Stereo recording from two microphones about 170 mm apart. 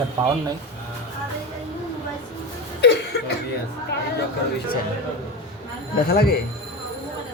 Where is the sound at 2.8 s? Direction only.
80° left.